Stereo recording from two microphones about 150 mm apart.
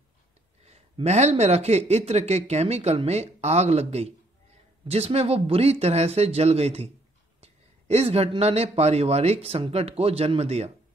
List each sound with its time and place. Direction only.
0.7 s speech: 45° right (ahead or behind)